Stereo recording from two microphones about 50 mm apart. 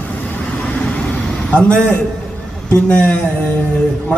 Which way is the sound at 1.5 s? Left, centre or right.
Left.